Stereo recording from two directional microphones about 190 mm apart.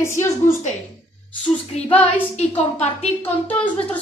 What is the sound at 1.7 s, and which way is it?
Female singing, 35° left (ahead or behind).